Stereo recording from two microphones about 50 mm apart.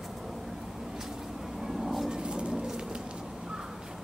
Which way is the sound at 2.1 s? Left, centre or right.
Centre.